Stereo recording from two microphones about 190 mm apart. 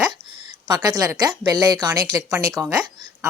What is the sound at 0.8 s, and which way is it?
Speech, 20° right (ahead or behind).